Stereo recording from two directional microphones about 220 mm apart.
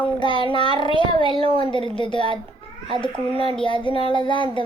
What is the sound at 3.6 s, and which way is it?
Speech, 20° left (ahead or behind).